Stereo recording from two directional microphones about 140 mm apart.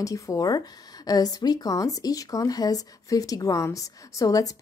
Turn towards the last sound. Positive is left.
turn(degrees=25)  # may be behind; listen again after turning